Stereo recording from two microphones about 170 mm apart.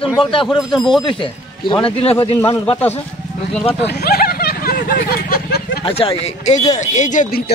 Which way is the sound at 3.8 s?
65° left (ahead or behind).